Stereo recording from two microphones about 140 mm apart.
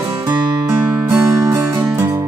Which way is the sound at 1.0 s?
20° right (ahead or behind).